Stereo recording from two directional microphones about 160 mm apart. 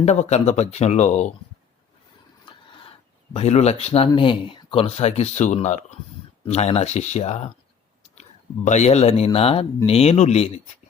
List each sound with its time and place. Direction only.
0.0 s speech: 45° left (ahead or behind)
2.5 s speech: 35° left (ahead or behind)